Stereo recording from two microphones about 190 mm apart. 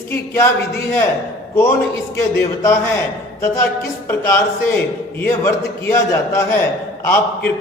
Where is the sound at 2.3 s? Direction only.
15° left (ahead or behind).